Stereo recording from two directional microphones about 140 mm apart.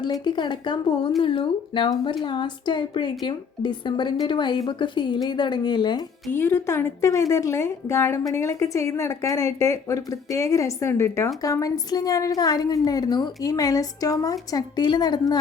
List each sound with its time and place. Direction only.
0.0 s a woman's voice: 30° left (ahead or behind)
6.3 s a woman's voice: 15° left (ahead or behind)